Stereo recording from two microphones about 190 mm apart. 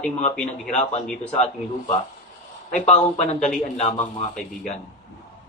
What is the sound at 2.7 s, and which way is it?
Speech, 35° left (ahead or behind).